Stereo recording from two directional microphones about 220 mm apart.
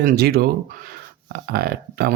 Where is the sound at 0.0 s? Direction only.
45° right (ahead or behind).